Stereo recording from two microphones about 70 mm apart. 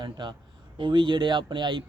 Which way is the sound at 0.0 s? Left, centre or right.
Right.